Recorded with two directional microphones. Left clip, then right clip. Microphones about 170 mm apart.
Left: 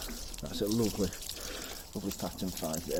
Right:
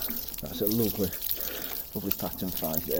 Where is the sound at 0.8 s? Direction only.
Centre (ahead or behind).